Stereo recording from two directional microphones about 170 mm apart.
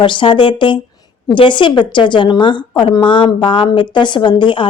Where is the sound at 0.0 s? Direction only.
30° left (ahead or behind).